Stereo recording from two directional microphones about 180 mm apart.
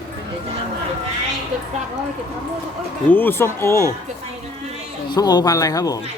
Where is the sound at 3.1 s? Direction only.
10° left (ahead or behind).